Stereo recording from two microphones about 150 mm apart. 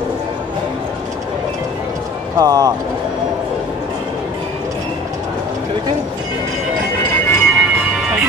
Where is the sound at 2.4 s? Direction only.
25° right (ahead or behind).